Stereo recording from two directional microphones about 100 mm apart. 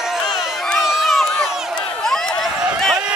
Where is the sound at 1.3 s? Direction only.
5° left (ahead or behind).